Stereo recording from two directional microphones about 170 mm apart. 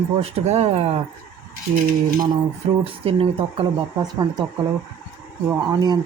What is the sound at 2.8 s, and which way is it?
Speech, 35° right (ahead or behind).